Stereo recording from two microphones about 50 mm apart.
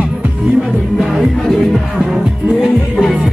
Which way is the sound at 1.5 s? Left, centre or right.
Centre.